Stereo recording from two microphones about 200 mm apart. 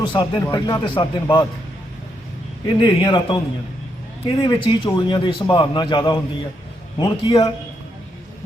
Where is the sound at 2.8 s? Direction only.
25° left (ahead or behind).